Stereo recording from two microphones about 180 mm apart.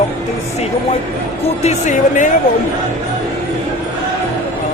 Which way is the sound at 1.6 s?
40° left (ahead or behind).